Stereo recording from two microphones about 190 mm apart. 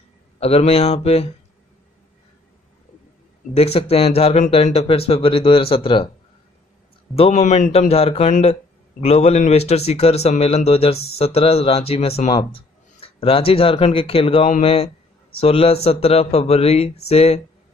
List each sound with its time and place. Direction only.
0.4 s speech: 30° left (ahead or behind)
3.5 s speech: 30° left (ahead or behind)
7.2 s speech: 35° left (ahead or behind)